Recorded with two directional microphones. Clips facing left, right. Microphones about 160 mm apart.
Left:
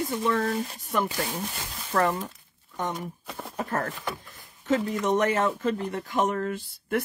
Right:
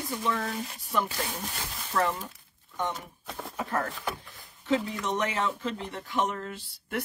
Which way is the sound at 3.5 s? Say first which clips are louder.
Left 2 dB; 50° left (ahead or behind).